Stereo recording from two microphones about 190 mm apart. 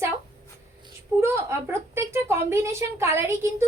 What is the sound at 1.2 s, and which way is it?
A woman's voice, 15° right (ahead or behind).